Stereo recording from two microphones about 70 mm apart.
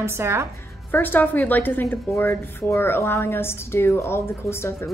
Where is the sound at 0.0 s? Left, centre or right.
Right.